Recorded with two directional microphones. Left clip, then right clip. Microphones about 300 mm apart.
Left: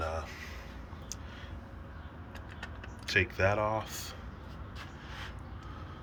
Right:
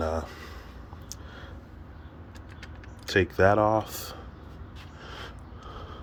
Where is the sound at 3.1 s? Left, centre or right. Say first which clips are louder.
Right 7 dB; right.